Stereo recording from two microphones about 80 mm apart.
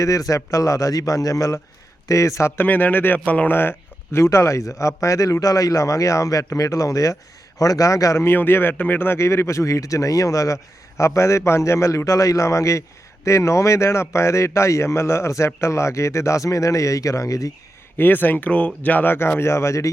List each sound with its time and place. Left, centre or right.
0.0 s a man's voice: left
2.6 s a man's voice: left
17.9 s speech: left